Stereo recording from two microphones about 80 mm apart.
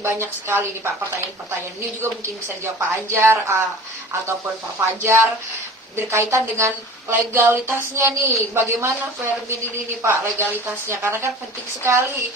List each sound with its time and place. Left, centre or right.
0.0 s a woman's voice: right
2.0 s a woman's voice: right
4.7 s a woman's voice: right
10.0 s a woman's voice: right